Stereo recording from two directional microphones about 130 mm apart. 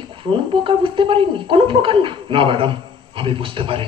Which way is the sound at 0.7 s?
40° right (ahead or behind).